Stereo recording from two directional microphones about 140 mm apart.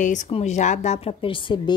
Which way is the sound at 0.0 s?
60° left (ahead or behind).